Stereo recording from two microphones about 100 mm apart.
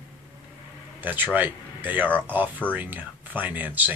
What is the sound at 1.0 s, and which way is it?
Speech, 20° right (ahead or behind).